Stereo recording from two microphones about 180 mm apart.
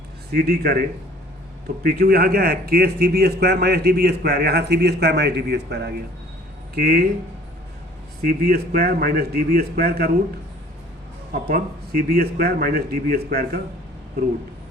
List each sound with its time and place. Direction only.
0.3 s speech: 60° right (ahead or behind)
8.2 s speech: 55° right (ahead or behind)
11.3 s speech: 55° right (ahead or behind)